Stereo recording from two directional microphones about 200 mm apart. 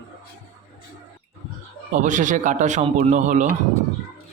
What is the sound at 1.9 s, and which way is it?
A man's voice, 40° right (ahead or behind).